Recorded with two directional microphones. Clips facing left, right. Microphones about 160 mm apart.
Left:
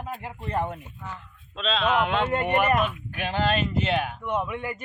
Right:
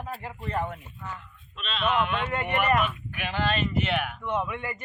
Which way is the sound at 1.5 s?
90° left.